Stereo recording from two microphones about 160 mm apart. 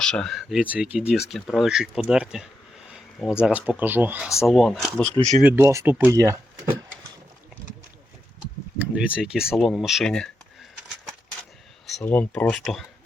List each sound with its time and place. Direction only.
0.0 s speech: 5° left (ahead or behind)
2.9 s a sound: 5° right (ahead or behind)
3.4 s speech: 10° right (ahead or behind)
4.4 s speech: centre (ahead or behind)
5.4 s speech: 10° right (ahead or behind)
8.8 s speech: 5° right (ahead or behind)
12.0 s speech: 10° left (ahead or behind)